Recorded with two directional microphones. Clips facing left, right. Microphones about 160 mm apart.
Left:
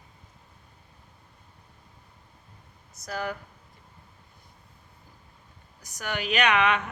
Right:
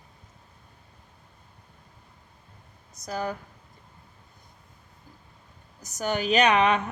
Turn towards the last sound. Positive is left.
turn(degrees=-35)  # may be behind; listen again after turning